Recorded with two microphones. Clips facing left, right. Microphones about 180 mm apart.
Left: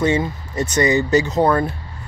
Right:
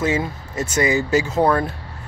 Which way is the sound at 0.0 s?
5° right (ahead or behind).